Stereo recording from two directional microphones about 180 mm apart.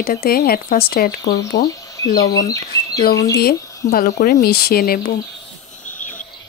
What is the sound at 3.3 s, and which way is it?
Speech, 55° left (ahead or behind).